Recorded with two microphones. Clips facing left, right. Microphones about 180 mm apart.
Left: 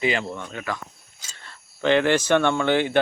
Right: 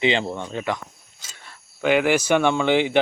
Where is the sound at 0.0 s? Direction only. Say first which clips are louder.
Right 3 dB; 25° right (ahead or behind).